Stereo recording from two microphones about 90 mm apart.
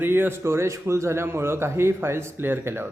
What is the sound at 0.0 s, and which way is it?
A man's voice, 25° right (ahead or behind).